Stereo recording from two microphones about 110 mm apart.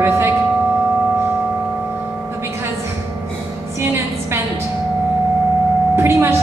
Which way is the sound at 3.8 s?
20° right (ahead or behind).